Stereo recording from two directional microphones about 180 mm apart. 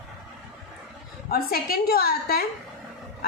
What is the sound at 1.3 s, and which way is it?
A woman's voice, 55° left (ahead or behind).